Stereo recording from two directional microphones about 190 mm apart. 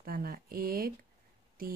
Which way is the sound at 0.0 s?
50° right (ahead or behind).